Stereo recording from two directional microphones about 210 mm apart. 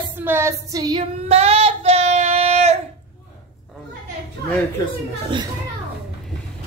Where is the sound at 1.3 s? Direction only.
30° right (ahead or behind).